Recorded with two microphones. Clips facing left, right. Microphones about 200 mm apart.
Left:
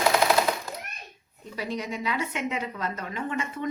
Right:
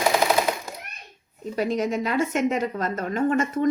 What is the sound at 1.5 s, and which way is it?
A woman's voice, 45° right (ahead or behind).